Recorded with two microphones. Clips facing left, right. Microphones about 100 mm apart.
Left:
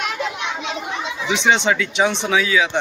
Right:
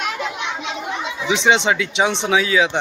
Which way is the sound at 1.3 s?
30° right (ahead or behind).